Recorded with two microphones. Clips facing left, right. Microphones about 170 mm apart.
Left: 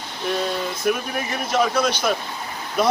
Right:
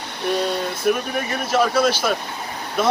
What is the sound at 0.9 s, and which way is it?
Speech, centre (ahead or behind).